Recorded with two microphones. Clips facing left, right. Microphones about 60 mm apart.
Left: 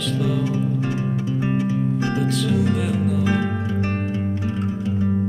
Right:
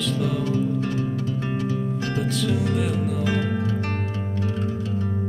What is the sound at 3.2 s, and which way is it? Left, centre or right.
Music, centre.